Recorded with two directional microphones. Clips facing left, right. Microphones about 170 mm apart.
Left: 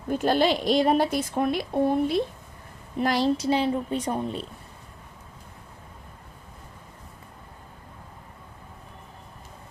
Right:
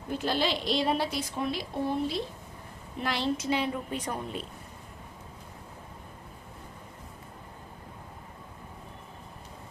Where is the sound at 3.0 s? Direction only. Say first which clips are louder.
Left 7 dB; 40° left (ahead or behind).